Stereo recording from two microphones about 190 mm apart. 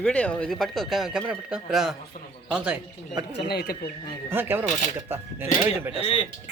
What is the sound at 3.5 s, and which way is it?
Speech, 55° left (ahead or behind).